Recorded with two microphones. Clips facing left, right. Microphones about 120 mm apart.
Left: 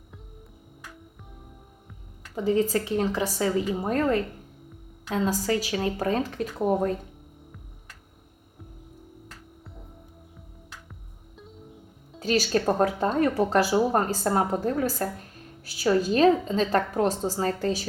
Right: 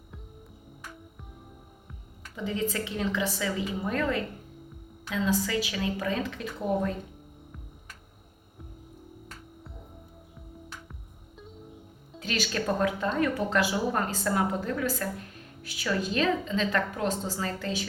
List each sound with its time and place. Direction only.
2.3 s speech: 40° left (ahead or behind)
12.2 s speech: 35° left (ahead or behind)